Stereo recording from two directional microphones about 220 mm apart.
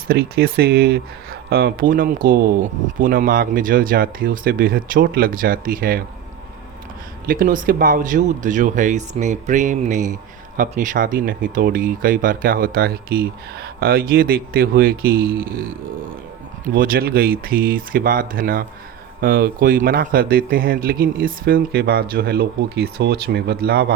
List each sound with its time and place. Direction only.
0.1 s speech: 45° right (ahead or behind)
7.3 s speech: 40° right (ahead or behind)
16.7 s speech: 40° right (ahead or behind)